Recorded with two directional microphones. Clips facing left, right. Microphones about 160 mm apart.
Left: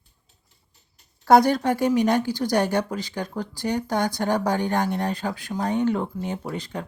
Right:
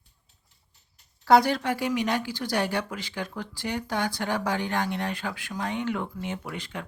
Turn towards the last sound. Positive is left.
turn(degrees=35)  # may be behind; listen again after turning